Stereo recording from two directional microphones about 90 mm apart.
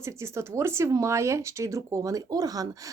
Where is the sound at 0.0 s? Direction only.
30° right (ahead or behind).